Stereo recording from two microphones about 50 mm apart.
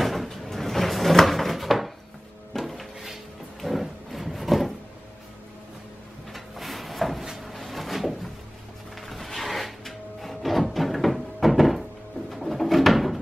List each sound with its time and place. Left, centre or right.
0.0 s drawer open or close: centre
3.6 s a sound: centre
6.3 s a sound: centre
7.3 s drawer open or close: centre
9.0 s music: centre
12.3 s bird: centre